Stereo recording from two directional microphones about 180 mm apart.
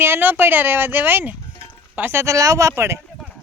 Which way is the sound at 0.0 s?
10° right (ahead or behind).